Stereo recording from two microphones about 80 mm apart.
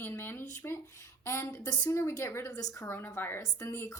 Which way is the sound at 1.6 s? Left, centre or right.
Left.